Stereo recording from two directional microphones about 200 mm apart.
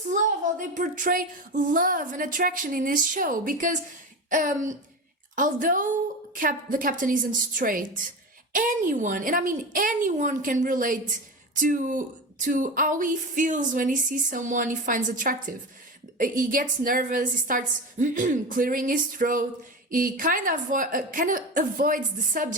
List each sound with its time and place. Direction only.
0.6 s a woman's voice: 40° right (ahead or behind)